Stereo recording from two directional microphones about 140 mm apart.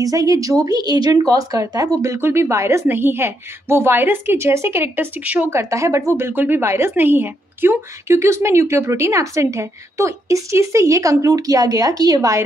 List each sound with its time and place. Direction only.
0.0 s speech: 25° right (ahead or behind)